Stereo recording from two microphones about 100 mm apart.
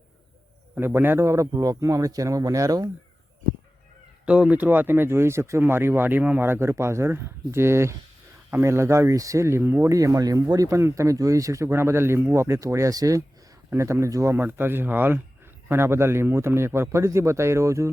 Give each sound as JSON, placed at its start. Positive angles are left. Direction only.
{"t": 0.8, "sound": "speech", "side_deg": -20}
{"t": 4.3, "sound": "speech", "side_deg": -15}
{"t": 9.9, "sound": "speech", "side_deg": -35}